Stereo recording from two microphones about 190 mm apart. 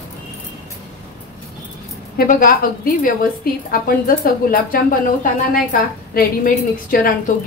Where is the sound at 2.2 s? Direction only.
50° left (ahead or behind).